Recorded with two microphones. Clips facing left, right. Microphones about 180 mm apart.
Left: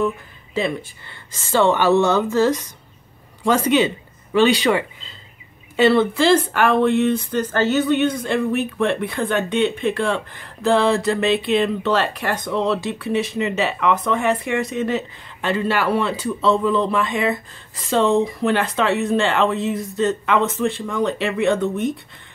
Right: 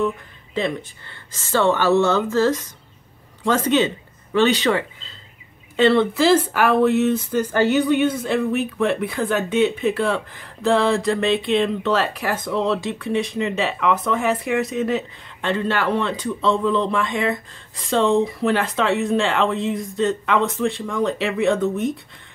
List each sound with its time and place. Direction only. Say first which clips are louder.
0.6 s speech: left 1 dB; 10° left (ahead or behind)